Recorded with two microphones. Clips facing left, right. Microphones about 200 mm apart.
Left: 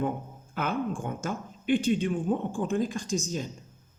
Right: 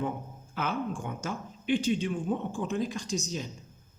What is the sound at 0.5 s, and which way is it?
Speech, 50° left (ahead or behind).